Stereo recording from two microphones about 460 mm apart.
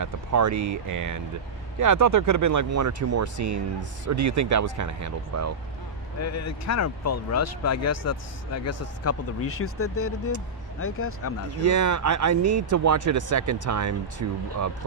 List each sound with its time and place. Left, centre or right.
0.0 s speech: right
6.1 s speech: left
11.7 s speech: right